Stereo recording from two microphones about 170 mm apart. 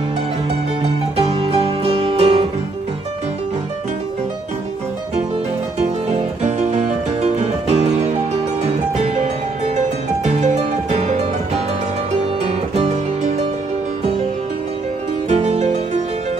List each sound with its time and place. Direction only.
1.3 s music: 30° right (ahead or behind)
6.0 s music: 40° right (ahead or behind)
12.7 s music: 40° right (ahead or behind)
15.2 s music: 40° right (ahead or behind)